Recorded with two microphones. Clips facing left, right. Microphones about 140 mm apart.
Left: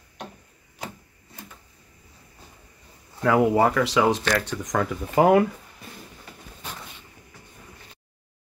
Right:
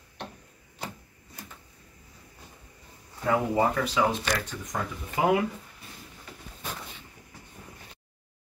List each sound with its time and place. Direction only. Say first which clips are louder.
3.2 s speech: left 6 dB; 75° left (ahead or behind)